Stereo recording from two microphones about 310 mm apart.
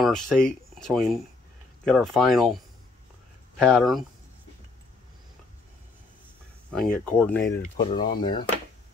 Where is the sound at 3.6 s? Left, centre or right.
Centre.